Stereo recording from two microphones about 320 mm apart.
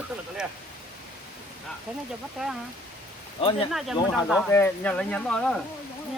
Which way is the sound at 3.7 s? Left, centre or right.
Centre.